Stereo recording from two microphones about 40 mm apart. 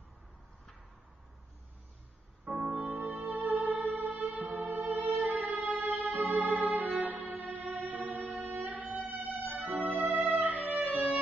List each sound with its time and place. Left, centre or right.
2.4 s music: right